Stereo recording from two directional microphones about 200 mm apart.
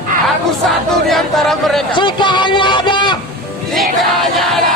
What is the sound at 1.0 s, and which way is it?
Speech, centre (ahead or behind).